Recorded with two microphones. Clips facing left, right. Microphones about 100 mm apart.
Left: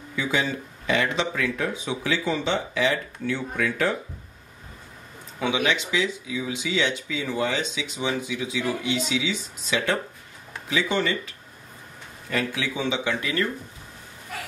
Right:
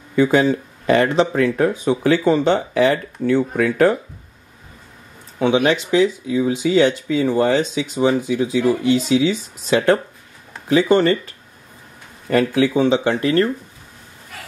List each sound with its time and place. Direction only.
0.1 s speech: 50° right (ahead or behind)
5.4 s speech: 35° right (ahead or behind)
12.3 s speech: 50° right (ahead or behind)